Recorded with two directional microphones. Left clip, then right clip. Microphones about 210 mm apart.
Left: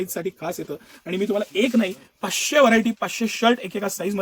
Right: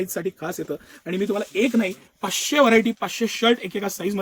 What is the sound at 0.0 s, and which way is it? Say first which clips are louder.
Speech: even; 25° left (ahead or behind).